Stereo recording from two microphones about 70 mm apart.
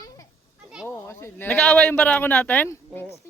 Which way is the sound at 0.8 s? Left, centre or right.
Left.